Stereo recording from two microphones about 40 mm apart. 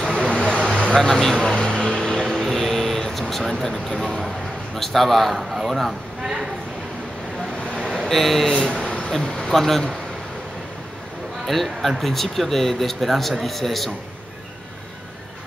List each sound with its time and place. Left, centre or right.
0.1 s vehicle: left
2.3 s a sound: centre
4.7 s a man's voice: centre
7.9 s speech: centre
8.8 s a sound: left
9.2 s speech: centre
11.4 s a man's voice: centre